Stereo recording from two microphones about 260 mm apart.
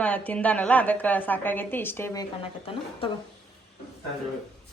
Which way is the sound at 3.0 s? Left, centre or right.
Left.